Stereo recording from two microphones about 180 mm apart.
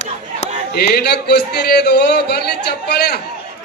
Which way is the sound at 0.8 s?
65° left (ahead or behind).